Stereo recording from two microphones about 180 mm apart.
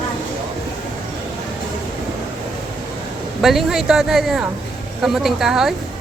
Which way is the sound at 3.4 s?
Centre (ahead or behind).